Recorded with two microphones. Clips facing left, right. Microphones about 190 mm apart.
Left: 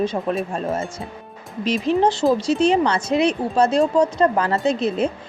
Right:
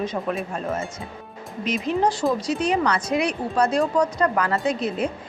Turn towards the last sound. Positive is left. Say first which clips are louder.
# left 4 dB
turn(degrees=25)  # may be behind; listen again after turning